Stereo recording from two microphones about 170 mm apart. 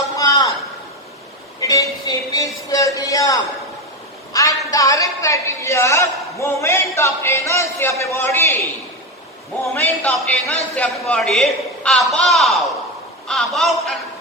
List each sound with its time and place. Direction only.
0.2 s a sound: 20° left (ahead or behind)
1.6 s a woman's voice: 20° left (ahead or behind)
9.7 s a man's voice: 10° left (ahead or behind)